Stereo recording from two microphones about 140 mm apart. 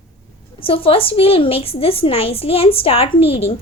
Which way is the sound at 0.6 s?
40° left (ahead or behind).